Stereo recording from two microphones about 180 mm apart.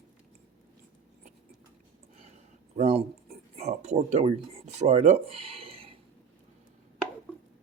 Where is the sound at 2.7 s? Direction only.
35° right (ahead or behind).